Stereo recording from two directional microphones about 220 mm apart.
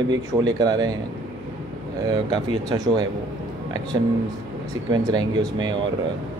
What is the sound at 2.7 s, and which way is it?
Speech, 20° right (ahead or behind).